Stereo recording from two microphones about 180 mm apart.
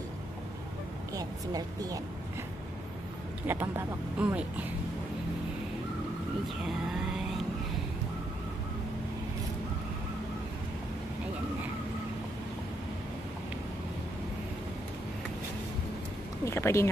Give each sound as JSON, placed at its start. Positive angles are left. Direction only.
{"t": 1.1, "sound": "speech", "side_deg": -20}
{"t": 3.4, "sound": "speech", "side_deg": -10}
{"t": 16.4, "sound": "speech", "side_deg": 15}